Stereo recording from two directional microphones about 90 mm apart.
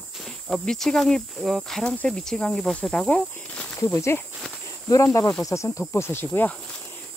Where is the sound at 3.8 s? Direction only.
35° left (ahead or behind).